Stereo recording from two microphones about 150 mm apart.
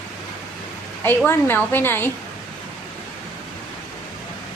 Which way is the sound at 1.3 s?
15° left (ahead or behind).